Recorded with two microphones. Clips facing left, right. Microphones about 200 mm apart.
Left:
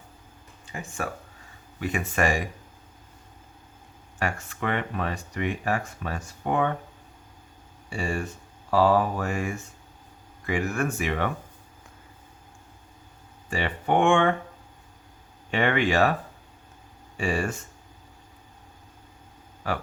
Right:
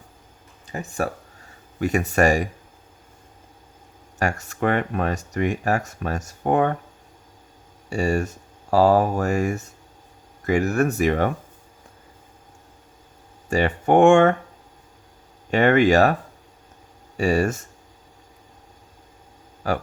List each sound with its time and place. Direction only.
0.7 s speech: 40° right (ahead or behind)
4.2 s speech: 40° right (ahead or behind)
7.9 s speech: 40° right (ahead or behind)
13.5 s speech: 45° right (ahead or behind)
15.4 s speech: 45° right (ahead or behind)
17.2 s speech: 40° right (ahead or behind)
19.6 s speech: 40° right (ahead or behind)